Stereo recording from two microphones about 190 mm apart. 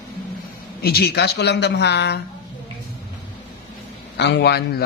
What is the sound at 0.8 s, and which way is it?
Speech, 55° left (ahead or behind).